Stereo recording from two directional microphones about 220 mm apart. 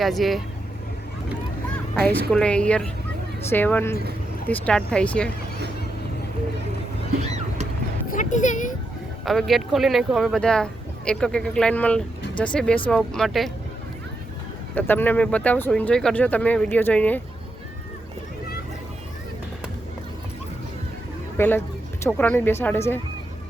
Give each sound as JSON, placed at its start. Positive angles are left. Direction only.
{"t": 0.0, "sound": "speech", "side_deg": 0}
{"t": 2.3, "sound": "speech", "side_deg": 5}
{"t": 7.2, "sound": "vehicle", "side_deg": -30}
{"t": 8.1, "sound": "speech", "side_deg": 35}
{"t": 9.2, "sound": "speech", "side_deg": 0}
{"t": 14.8, "sound": "speech", "side_deg": 10}
{"t": 21.3, "sound": "speech", "side_deg": 10}